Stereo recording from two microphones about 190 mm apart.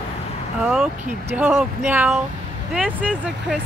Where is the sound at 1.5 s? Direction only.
Centre (ahead or behind).